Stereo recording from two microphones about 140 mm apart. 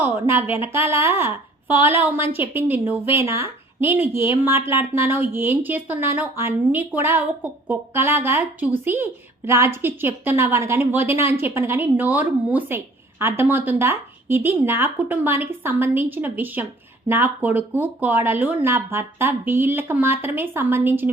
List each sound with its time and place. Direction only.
0.3 s a woman's voice: 15° right (ahead or behind)